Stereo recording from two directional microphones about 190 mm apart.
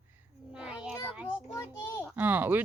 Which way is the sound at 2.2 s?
10° right (ahead or behind).